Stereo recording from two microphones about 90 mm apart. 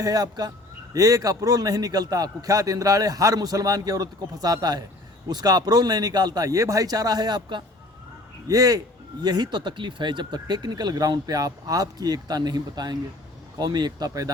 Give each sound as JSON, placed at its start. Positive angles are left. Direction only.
{"t": 0.0, "sound": "a man's voice", "side_deg": -45}
{"t": 8.4, "sound": "a man's voice", "side_deg": -40}